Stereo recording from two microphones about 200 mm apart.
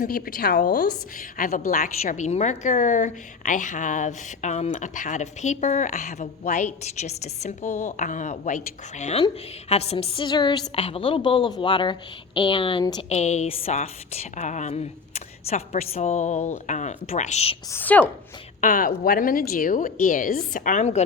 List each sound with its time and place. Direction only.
0.0 s a woman's voice: 45° left (ahead or behind)
1.4 s a woman's voice: 40° left (ahead or behind); by 13.1 s 25° left (ahead or behind)
13.1 s a woman's voice: 35° left (ahead or behind)
17.7 s a woman's voice: 10° left (ahead or behind)
18.6 s a woman's voice: 45° left (ahead or behind)